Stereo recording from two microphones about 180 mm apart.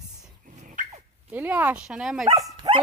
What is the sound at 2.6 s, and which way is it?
Speech, 20° right (ahead or behind).